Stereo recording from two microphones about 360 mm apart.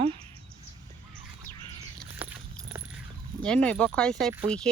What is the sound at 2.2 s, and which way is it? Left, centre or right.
Keys jangling, centre.